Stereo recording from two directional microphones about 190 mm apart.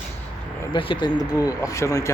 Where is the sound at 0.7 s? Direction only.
25° left (ahead or behind).